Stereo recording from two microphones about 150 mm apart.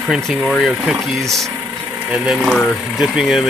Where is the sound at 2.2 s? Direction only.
5° right (ahead or behind).